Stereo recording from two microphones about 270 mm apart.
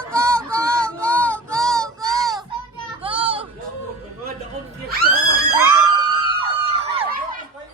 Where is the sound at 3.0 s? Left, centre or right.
Centre.